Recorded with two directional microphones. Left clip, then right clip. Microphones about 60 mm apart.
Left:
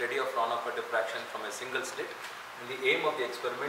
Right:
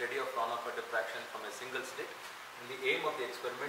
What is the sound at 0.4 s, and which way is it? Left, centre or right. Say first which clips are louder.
Speech: left 5 dB; left.